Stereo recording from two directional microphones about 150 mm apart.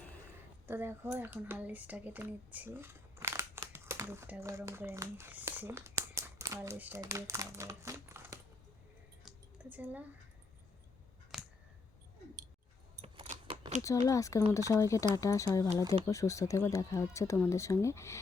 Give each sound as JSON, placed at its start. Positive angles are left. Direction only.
{"t": 0.7, "sound": "speech", "side_deg": -15}
{"t": 6.1, "sound": "crumpling", "side_deg": -20}
{"t": 7.0, "sound": "speech", "side_deg": -20}
{"t": 9.2, "sound": "a sound", "side_deg": -10}
{"t": 11.3, "sound": "a sound", "side_deg": 0}
{"t": 13.0, "sound": "keys jangling", "side_deg": -40}
{"t": 13.8, "sound": "speech", "side_deg": 20}